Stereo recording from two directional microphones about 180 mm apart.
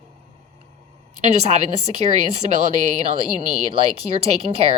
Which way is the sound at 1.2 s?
40° right (ahead or behind).